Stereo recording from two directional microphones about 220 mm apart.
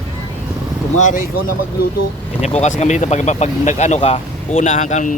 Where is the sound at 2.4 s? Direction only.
30° left (ahead or behind).